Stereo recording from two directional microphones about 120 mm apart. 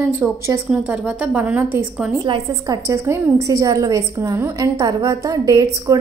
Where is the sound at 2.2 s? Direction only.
35° right (ahead or behind).